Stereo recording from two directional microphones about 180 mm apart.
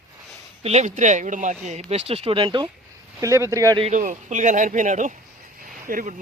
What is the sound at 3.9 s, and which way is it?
Speech, 45° right (ahead or behind).